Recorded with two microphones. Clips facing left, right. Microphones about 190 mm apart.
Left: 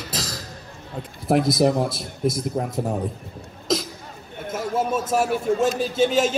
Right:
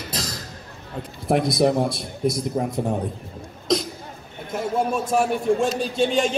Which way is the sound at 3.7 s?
5° left (ahead or behind).